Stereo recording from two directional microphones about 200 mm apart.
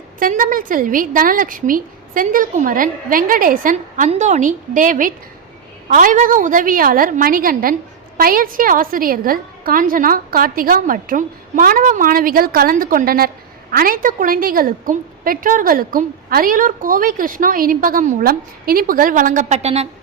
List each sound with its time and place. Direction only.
0.2 s a woman's voice: 45° right (ahead or behind)